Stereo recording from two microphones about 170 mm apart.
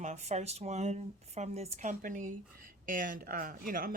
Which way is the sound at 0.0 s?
40° right (ahead or behind).